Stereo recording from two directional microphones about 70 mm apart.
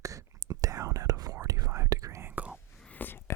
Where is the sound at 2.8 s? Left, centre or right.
Left.